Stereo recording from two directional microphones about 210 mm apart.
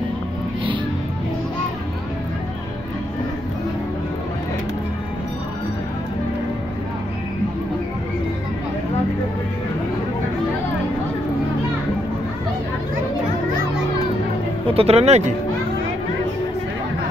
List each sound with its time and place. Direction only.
14.7 s speech: 30° right (ahead or behind)